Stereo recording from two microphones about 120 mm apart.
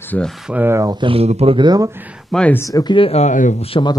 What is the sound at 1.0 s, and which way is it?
Speech, 55° right (ahead or behind).